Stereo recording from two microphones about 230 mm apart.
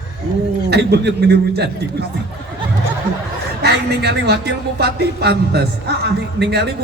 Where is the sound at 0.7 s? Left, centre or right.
Right.